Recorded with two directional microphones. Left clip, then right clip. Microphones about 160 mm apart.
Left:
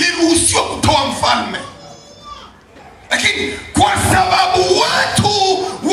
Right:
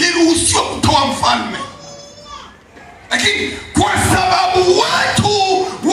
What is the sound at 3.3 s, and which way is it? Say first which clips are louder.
Music: even; 35° left (ahead or behind).